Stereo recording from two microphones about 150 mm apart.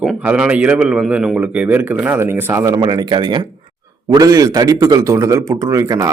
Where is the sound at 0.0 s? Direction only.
5° right (ahead or behind).